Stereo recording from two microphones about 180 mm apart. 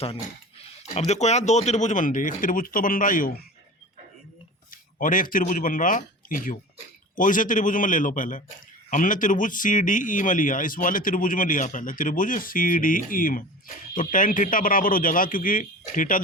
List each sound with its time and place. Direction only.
0.6 s speech: 35° left (ahead or behind)
4.7 s speech: 50° left (ahead or behind)